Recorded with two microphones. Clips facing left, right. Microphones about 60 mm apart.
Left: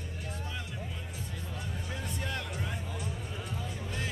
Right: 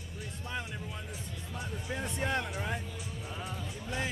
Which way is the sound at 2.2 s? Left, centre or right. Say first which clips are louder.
Right 7 dB; right.